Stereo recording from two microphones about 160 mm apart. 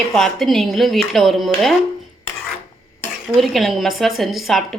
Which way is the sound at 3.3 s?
Centre (ahead or behind).